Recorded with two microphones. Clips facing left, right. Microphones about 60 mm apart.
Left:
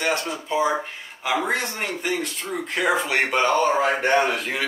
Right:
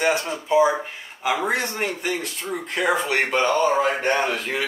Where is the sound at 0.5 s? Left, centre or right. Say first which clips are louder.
Right 5 dB; centre.